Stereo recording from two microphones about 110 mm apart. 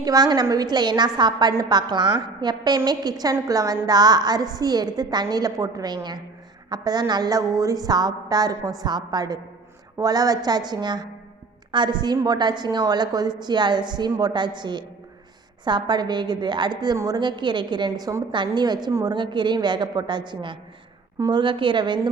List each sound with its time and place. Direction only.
0.0 s a woman's voice: 35° right (ahead or behind)